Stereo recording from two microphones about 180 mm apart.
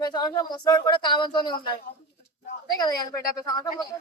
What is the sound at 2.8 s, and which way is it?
Speech, 20° left (ahead or behind).